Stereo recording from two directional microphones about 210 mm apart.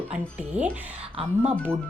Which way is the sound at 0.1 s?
5° right (ahead or behind).